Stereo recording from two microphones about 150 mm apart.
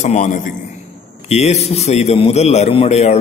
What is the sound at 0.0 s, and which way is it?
A man's voice, 50° left (ahead or behind).